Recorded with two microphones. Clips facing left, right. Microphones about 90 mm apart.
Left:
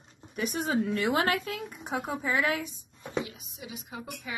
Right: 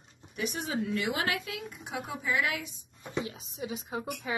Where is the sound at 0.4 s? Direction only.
45° left (ahead or behind).